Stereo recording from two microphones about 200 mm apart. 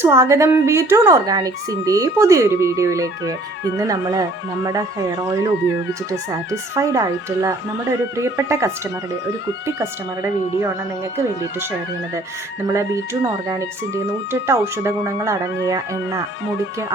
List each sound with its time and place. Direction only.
0.0 s speech: 15° right (ahead or behind)
12.6 s speech: 15° right (ahead or behind)